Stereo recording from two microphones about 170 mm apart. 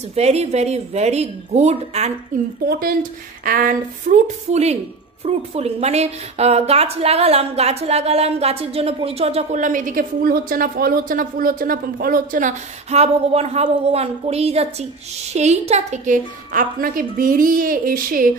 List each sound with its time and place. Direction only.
0.1 s a woman's voice: 40° right (ahead or behind)
2.6 s a woman's voice: 60° right (ahead or behind)